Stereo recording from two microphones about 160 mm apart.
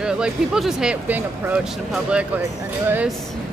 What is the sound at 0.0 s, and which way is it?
A man's voice, 5° right (ahead or behind).